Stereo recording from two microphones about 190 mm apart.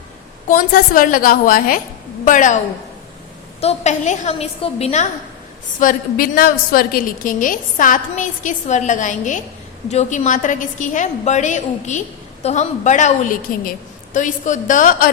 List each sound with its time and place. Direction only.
0.4 s a woman's voice: 45° left (ahead or behind)
3.6 s a woman's voice: 35° left (ahead or behind)
5.8 s a woman's voice: 45° left (ahead or behind)